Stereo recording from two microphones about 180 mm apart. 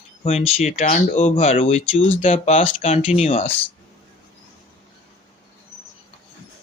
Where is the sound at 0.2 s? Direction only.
35° left (ahead or behind).